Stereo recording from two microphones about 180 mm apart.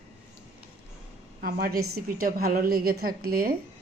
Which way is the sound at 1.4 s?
55° right (ahead or behind).